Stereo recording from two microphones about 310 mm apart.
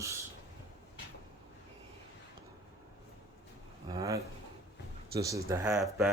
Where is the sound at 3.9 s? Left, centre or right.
Centre.